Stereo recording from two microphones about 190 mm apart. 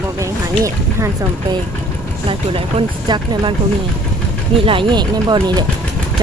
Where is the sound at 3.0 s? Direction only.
25° right (ahead or behind).